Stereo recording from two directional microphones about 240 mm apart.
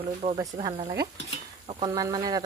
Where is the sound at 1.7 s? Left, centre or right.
Centre.